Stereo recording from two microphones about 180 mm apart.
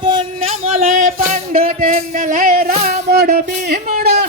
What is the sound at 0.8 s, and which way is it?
Music, 50° right (ahead or behind).